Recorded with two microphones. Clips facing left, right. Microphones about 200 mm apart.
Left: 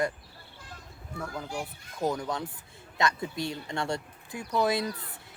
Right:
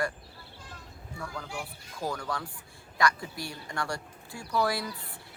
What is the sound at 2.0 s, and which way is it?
Speech, 20° left (ahead or behind).